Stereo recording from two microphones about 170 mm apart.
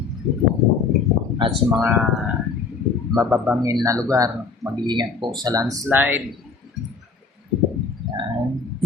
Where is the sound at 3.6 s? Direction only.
20° right (ahead or behind).